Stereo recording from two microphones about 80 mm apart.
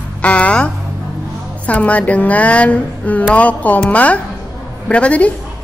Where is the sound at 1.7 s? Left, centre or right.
Centre.